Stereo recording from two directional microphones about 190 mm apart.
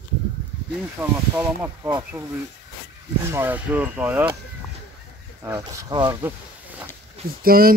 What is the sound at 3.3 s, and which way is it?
Speech, 10° right (ahead or behind).